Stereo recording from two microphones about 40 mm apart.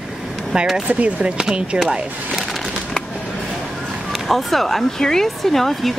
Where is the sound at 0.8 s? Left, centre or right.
Right.